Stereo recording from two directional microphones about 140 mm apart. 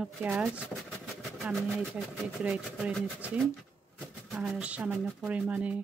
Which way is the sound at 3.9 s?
Centre (ahead or behind).